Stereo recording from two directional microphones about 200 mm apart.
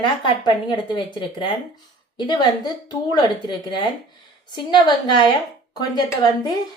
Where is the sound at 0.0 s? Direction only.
25° left (ahead or behind).